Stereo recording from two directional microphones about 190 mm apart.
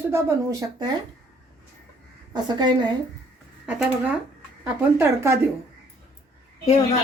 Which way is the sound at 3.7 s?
5° right (ahead or behind).